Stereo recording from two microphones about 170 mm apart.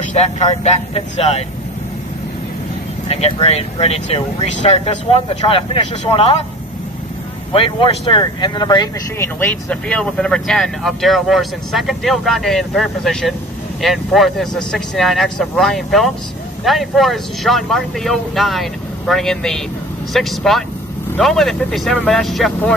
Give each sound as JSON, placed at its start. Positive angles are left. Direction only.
{"t": 0.0, "sound": "speech", "side_deg": 40}
{"t": 3.1, "sound": "speech", "side_deg": 35}
{"t": 7.5, "sound": "speech", "side_deg": 30}
{"t": 9.2, "sound": "speech", "side_deg": 10}